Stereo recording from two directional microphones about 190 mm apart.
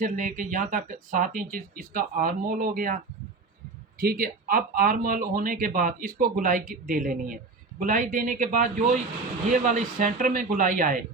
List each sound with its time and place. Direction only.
0.0 s speech: 45° right (ahead or behind)
4.0 s speech: 50° right (ahead or behind)